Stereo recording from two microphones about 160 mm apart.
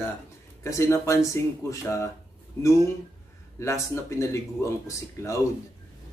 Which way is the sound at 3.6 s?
20° left (ahead or behind).